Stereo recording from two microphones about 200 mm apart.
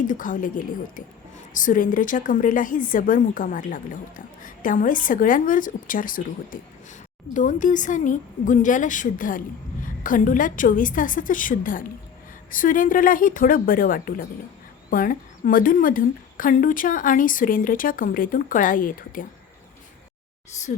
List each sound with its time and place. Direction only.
0.1 s a woman's voice: 40° left (ahead or behind)